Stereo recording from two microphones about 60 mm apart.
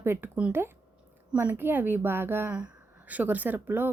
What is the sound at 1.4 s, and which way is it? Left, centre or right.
A woman's voice, right.